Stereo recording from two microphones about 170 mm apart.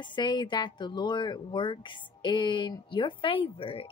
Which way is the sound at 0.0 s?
25° left (ahead or behind).